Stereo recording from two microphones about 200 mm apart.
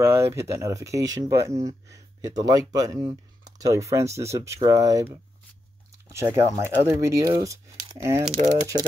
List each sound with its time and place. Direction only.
0.0 s speech: 10° right (ahead or behind)
8.3 s speech: 35° right (ahead or behind)